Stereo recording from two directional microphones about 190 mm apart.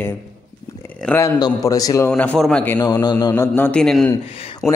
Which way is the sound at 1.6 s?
15° left (ahead or behind).